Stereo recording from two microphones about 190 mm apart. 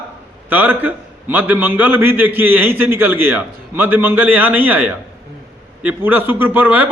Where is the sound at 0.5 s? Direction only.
10° right (ahead or behind).